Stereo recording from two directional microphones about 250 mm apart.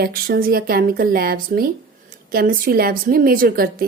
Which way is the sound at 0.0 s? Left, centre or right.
Right.